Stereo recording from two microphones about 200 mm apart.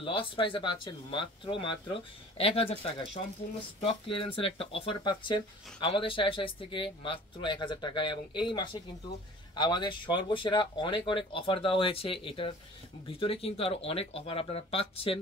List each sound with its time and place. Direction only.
0.0 s speech: 25° left (ahead or behind)